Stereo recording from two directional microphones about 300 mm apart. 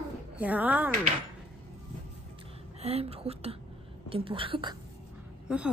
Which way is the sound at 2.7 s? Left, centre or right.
Right.